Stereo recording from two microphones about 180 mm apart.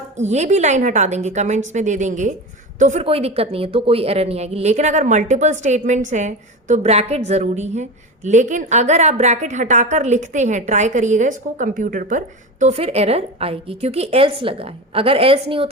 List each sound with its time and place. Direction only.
0.2 s speech: 40° right (ahead or behind)